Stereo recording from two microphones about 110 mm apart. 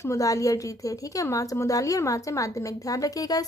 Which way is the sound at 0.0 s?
30° left (ahead or behind).